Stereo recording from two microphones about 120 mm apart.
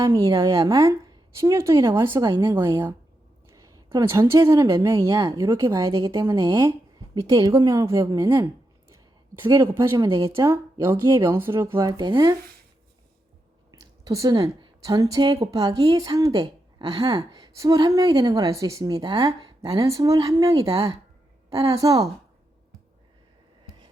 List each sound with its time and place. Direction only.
0.0 s speech: 30° right (ahead or behind)
3.5 s a sound: 30° right (ahead or behind)
3.9 s speech: 25° right (ahead or behind)
11.8 s speech: 35° right (ahead or behind)
13.7 s a woman's voice: 30° right (ahead or behind)
16.4 s a woman's voice: 50° right (ahead or behind)
17.4 s speech: 30° right (ahead or behind); by 19.5 s 50° right (ahead or behind)
19.6 s speech: 30° right (ahead or behind)
21.7 s speech: 30° right (ahead or behind)